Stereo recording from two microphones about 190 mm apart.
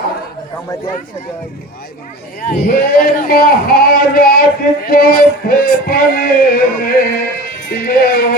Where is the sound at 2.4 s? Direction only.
45° left (ahead or behind).